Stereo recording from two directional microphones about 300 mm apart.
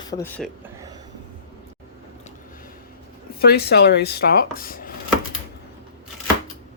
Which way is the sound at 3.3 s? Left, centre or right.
Left.